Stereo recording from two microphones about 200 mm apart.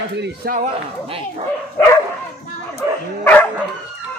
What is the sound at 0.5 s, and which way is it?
Speech, 35° right (ahead or behind).